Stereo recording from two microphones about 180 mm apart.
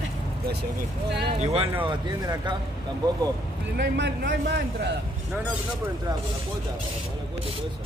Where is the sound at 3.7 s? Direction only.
75° right (ahead or behind).